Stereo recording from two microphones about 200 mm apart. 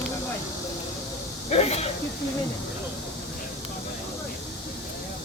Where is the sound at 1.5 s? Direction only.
30° left (ahead or behind).